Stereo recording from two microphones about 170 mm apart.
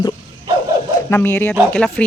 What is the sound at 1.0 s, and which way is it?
Speech, 15° left (ahead or behind).